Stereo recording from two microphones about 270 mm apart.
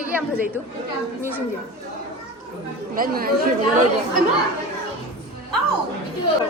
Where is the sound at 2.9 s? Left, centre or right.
Right.